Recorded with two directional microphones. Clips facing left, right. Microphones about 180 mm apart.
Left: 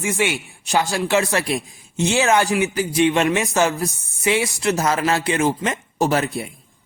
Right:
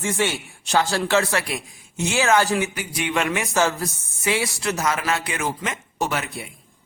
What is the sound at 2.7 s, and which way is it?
A man's voice, 30° left (ahead or behind).